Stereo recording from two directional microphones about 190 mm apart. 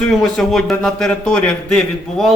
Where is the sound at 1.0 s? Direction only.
5° left (ahead or behind).